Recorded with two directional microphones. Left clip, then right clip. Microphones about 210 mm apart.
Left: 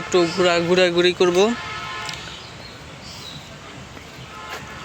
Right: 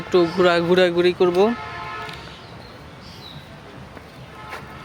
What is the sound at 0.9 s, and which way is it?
Speech, centre (ahead or behind).